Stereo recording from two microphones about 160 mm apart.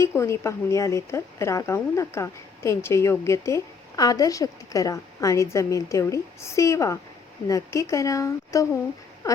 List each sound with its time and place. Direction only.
0.0 s speech: 15° left (ahead or behind)